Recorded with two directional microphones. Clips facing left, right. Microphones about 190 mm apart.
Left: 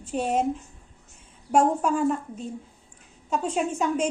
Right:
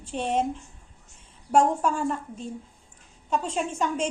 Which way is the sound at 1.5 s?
5° left (ahead or behind).